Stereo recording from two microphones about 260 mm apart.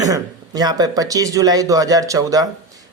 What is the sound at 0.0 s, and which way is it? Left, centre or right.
Speech, centre.